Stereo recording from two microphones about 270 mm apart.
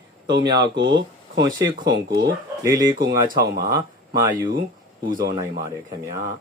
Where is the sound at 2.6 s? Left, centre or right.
Centre.